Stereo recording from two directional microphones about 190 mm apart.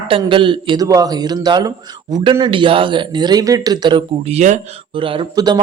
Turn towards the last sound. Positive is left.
turn(degrees=-25)  # may be behind; listen again after turning